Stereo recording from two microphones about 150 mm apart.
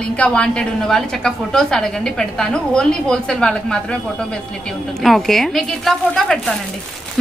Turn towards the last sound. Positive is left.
turn(degrees=5)  # may be behind; listen again after turning